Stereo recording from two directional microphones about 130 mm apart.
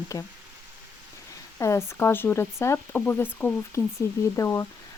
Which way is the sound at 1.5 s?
25° left (ahead or behind).